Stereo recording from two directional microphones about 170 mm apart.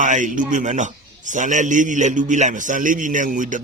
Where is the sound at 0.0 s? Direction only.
50° right (ahead or behind).